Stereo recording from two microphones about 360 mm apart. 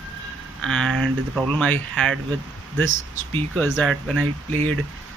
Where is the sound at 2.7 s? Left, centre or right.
Right.